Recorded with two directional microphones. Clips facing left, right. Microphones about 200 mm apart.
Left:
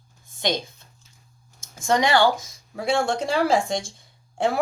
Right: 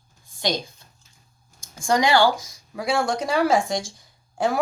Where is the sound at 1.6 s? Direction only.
25° left (ahead or behind).